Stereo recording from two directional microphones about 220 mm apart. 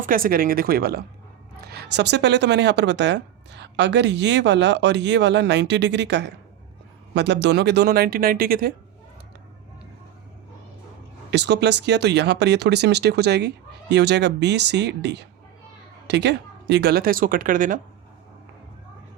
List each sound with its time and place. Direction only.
0.0 s speech: 40° right (ahead or behind)
11.3 s speech: 50° right (ahead or behind)